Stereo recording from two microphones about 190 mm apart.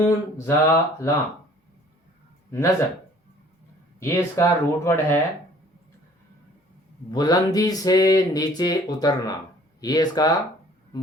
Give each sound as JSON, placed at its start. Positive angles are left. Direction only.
{"t": 0.0, "sound": "speech", "side_deg": 15}
{"t": 2.5, "sound": "speech", "side_deg": 15}
{"t": 4.0, "sound": "speech", "side_deg": 15}
{"t": 7.1, "sound": "speech", "side_deg": 20}